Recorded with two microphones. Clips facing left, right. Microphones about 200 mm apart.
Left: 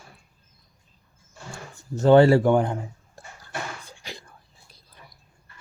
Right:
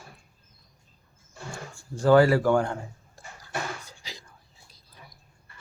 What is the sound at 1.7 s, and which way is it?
Speech, 25° left (ahead or behind).